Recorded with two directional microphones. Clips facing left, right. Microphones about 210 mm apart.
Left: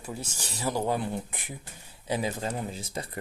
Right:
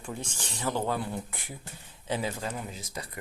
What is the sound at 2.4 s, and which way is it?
Speech, 30° left (ahead or behind).